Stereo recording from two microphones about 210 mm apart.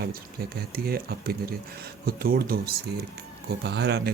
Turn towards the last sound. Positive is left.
turn(degrees=-50)  # may be behind; listen again after turning